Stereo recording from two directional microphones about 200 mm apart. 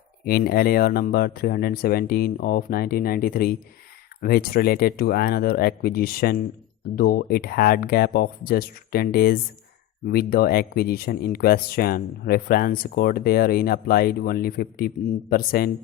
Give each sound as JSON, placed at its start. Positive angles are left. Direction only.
{"t": 0.3, "sound": "speech", "side_deg": 50}